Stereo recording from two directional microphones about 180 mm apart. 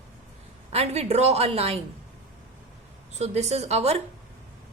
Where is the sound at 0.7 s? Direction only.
35° right (ahead or behind).